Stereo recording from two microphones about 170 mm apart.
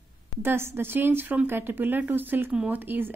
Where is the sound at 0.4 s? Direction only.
15° right (ahead or behind).